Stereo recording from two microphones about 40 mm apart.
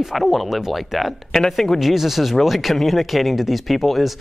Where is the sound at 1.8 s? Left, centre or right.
Centre.